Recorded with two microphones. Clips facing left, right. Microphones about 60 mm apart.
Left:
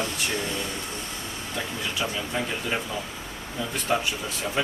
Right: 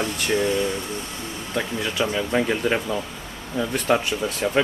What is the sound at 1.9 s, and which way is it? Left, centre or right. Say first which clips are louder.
Speech: right 8 dB; right.